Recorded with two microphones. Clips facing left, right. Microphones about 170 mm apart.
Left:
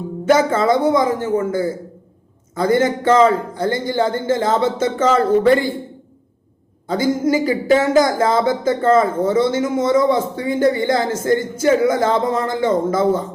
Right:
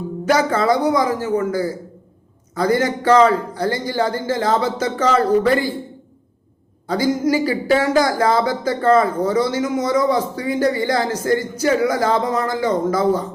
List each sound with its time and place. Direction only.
0.3 s speech: 25° left (ahead or behind)
6.8 s speech: 25° left (ahead or behind)